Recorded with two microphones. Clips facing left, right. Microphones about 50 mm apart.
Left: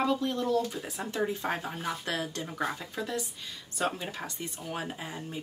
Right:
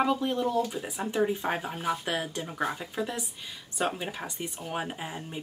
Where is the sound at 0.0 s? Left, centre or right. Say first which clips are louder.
Right 2 dB; centre.